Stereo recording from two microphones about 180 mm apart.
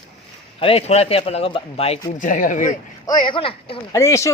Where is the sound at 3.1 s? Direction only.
25° left (ahead or behind).